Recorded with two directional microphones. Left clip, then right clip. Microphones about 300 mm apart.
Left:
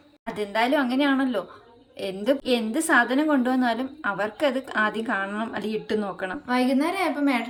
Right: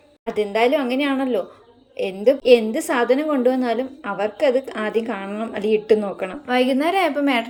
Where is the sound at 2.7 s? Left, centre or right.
Centre.